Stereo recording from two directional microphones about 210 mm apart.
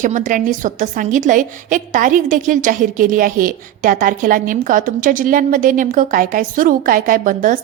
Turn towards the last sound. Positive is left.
turn(degrees=-40)  # may be behind; listen again after turning